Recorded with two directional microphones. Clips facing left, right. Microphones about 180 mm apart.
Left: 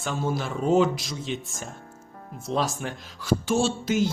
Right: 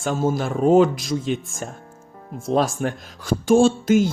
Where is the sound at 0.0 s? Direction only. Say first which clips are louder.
Right 6 dB; 45° right (ahead or behind).